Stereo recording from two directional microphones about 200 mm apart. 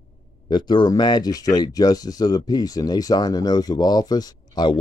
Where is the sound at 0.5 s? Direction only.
20° left (ahead or behind).